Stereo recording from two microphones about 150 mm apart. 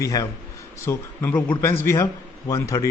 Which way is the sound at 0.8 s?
15° left (ahead or behind).